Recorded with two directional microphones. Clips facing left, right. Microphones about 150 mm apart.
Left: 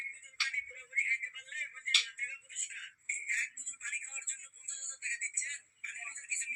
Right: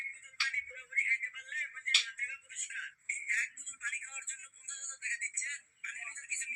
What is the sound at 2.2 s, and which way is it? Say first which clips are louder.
Telephone: right 1 dB; 25° left (ahead or behind).